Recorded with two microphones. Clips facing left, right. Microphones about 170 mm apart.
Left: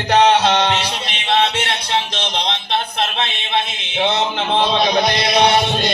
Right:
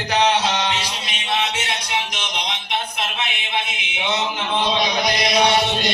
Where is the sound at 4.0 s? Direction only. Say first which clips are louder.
Left 6 dB; 60° left (ahead or behind).